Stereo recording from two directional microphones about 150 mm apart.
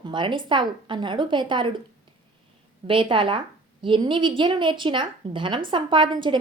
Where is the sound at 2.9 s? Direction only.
35° right (ahead or behind).